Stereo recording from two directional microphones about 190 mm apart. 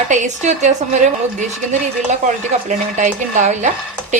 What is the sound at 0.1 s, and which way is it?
Speech, 40° right (ahead or behind).